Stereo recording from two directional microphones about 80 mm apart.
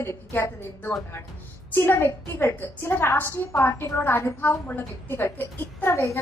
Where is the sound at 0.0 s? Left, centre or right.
Left.